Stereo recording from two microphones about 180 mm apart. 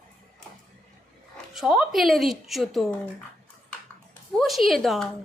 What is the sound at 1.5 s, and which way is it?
Speech, 5° right (ahead or behind).